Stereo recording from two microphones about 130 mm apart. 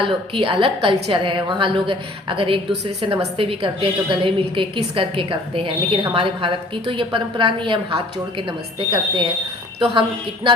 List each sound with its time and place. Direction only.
0.0 s a woman's voice: 40° right (ahead or behind)